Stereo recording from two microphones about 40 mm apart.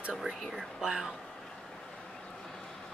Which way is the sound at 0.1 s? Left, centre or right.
Centre.